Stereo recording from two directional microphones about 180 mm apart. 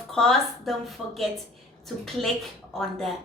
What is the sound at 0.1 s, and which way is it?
Speech, 5° left (ahead or behind).